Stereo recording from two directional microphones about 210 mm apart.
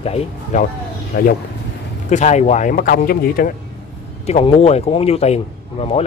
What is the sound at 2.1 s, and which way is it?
Speech, 35° left (ahead or behind).